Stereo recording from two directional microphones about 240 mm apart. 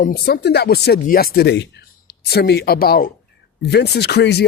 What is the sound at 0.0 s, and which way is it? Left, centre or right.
Speech, left.